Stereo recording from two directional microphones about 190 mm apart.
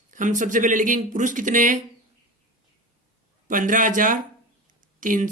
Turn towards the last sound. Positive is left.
turn(degrees=-45)  # may be behind; listen again after turning